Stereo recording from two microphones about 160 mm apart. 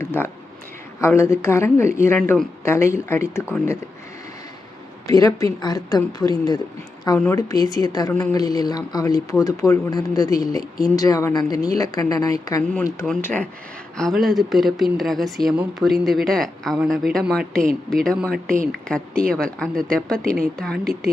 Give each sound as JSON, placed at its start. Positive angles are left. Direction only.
{"t": 0.0, "sound": "speech", "side_deg": 15}
{"t": 5.0, "sound": "a woman's voice", "side_deg": 20}